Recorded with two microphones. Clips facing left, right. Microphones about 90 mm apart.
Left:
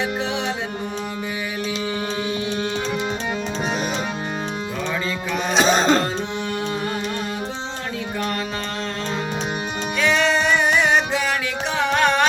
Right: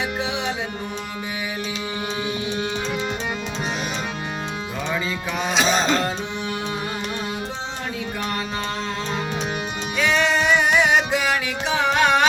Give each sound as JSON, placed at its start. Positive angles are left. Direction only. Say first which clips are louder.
{"t": 0.0, "sound": "music", "louder": "left 2 dB", "side_deg": -5}
{"t": 2.5, "sound": "music", "louder": "left 1 dB", "side_deg": -5}
{"t": 5.5, "sound": "music", "louder": "left 4 dB", "side_deg": 40}
{"t": 10.0, "sound": "music", "louder": "left 1 dB", "side_deg": -5}